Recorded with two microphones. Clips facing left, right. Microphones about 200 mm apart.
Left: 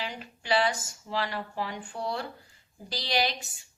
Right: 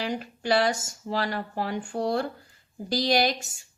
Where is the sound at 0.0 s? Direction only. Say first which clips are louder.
Right 8 dB; 45° right (ahead or behind).